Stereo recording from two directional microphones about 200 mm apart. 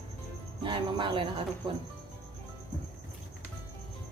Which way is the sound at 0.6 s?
25° right (ahead or behind).